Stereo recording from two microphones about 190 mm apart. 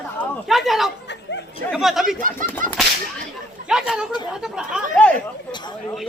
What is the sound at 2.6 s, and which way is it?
Whip, 45° right (ahead or behind).